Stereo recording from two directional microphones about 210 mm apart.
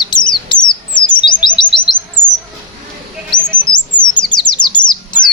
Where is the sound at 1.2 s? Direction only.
20° left (ahead or behind).